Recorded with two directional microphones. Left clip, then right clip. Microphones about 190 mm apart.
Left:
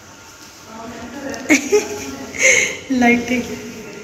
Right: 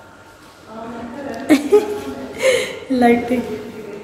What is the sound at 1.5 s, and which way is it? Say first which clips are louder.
Speech: right 2 dB; 10° right (ahead or behind).